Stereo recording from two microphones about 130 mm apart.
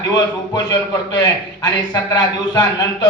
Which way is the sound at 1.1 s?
30° left (ahead or behind).